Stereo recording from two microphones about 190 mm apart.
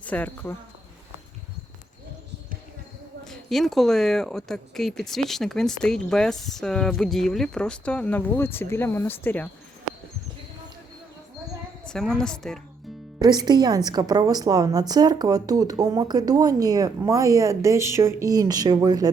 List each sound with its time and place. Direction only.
0.0 s speech: 10° left (ahead or behind)
3.2 s speech: centre (ahead or behind)
11.9 s speech: 5° left (ahead or behind)
13.1 s a woman's voice: 20° right (ahead or behind)